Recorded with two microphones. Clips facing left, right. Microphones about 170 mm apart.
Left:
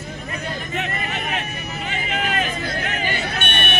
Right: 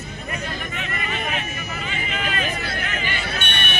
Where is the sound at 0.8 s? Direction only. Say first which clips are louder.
Left 1 dB; 65° left (ahead or behind).